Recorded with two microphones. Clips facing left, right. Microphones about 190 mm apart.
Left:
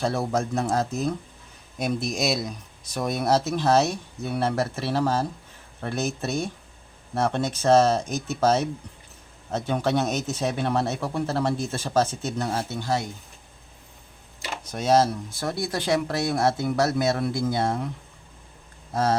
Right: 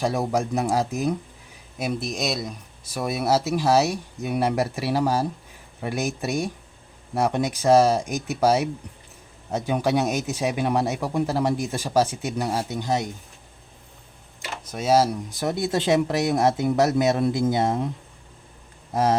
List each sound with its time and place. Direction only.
0.0 s speech: 15° right (ahead or behind)
1.8 s speech: 5° right (ahead or behind)
14.7 s speech: 5° right (ahead or behind); by 17.9 s 20° right (ahead or behind)
18.9 s speech: 20° right (ahead or behind)